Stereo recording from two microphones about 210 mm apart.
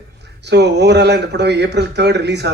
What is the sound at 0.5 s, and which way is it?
A man's voice, 55° right (ahead or behind).